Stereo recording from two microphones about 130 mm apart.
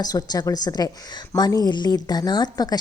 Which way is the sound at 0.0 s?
30° left (ahead or behind).